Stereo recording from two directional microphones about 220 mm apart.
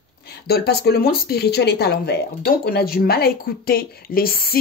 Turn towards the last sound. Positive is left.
turn(degrees=40)  # may be behind; listen again after turning